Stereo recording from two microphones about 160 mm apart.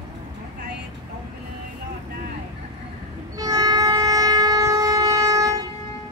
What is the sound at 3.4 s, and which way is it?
Train, 25° right (ahead or behind).